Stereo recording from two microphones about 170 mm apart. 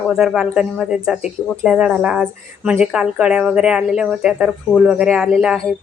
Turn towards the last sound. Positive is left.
turn(degrees=0)  # may be behind; listen again after turning